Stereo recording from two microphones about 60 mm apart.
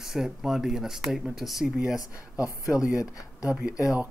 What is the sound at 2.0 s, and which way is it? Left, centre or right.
Speech, left.